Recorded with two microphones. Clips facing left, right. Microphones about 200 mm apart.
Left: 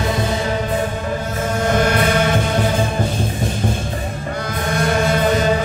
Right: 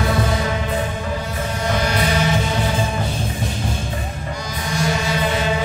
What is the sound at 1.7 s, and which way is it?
Music, 55° left (ahead or behind).